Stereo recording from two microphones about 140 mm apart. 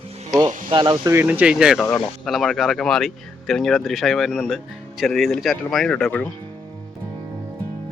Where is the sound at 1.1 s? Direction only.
15° right (ahead or behind); by 6.0 s 5° left (ahead or behind).